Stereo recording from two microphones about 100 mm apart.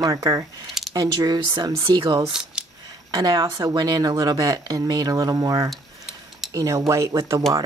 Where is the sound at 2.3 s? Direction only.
5° right (ahead or behind).